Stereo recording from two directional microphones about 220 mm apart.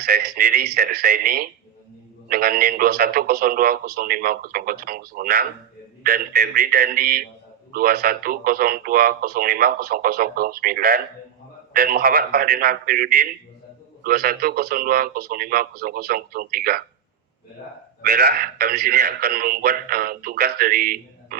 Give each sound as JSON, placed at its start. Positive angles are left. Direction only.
{"t": 0.0, "sound": "a man's voice", "side_deg": -45}
{"t": 18.0, "sound": "speech", "side_deg": -50}